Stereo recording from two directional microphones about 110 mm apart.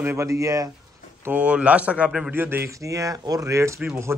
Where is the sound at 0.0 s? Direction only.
15° right (ahead or behind).